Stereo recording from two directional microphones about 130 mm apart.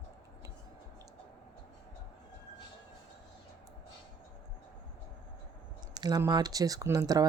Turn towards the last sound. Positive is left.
turn(degrees=-25)  # may be behind; listen again after turning